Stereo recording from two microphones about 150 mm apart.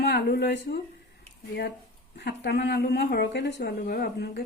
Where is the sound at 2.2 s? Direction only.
90° left.